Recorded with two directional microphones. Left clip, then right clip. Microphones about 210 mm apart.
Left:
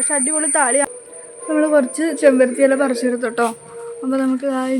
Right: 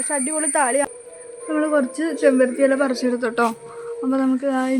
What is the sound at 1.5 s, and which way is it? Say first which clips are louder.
A woman's voice: left 5 dB; 25° left (ahead or behind).